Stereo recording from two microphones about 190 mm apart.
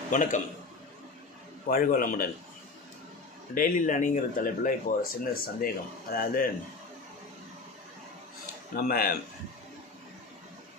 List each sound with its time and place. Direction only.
0.1 s speech: 45° left (ahead or behind)
1.6 s speech: 45° left (ahead or behind)
3.5 s speech: 45° left (ahead or behind)
8.7 s speech: 55° left (ahead or behind)